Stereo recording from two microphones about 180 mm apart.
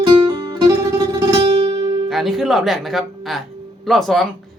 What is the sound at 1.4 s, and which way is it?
Music, 30° right (ahead or behind).